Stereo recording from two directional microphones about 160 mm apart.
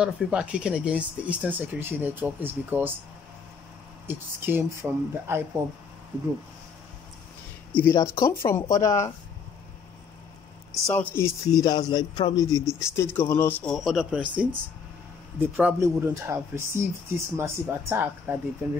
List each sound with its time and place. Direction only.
0.0 s speech: 5° right (ahead or behind)
4.1 s speech: 15° right (ahead or behind)
7.7 s a man's voice: 15° left (ahead or behind)
11.1 s a man's voice: 25° left (ahead or behind)
13.7 s speech: centre (ahead or behind)